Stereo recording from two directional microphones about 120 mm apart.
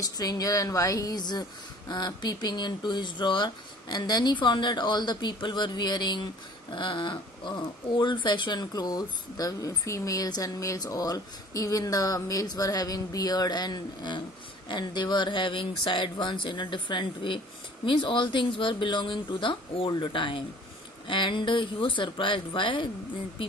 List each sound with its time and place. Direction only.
0.0 s speech: 30° left (ahead or behind)